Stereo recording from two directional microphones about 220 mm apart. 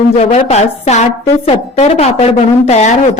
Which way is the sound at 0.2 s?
30° left (ahead or behind).